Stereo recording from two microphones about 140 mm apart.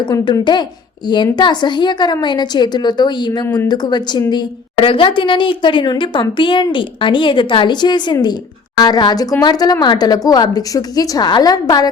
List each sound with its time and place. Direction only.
0.0 s a woman's voice: 35° left (ahead or behind)
3.4 s speech: 20° left (ahead or behind)
3.7 s a woman's voice: 30° left (ahead or behind)